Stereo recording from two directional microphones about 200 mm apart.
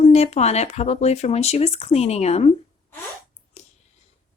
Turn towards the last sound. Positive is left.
turn(degrees=35)  # may be behind; listen again after turning